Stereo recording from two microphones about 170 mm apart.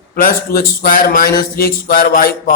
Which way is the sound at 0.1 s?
55° left (ahead or behind).